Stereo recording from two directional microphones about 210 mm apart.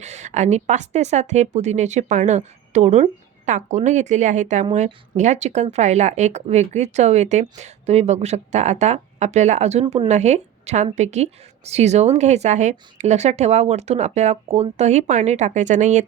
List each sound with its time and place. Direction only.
0.0 s a woman's voice: 35° right (ahead or behind)
9.8 s speech: 20° right (ahead or behind)
10.1 s a woman's voice: 35° right (ahead or behind)